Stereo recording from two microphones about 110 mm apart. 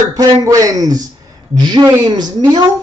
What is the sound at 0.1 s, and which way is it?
Speech, 30° right (ahead or behind).